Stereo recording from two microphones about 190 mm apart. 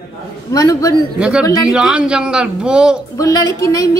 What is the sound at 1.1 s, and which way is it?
Speech, 5° right (ahead or behind).